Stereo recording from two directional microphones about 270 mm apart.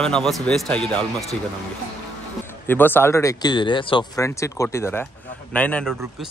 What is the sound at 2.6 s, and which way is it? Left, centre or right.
A man's voice, centre.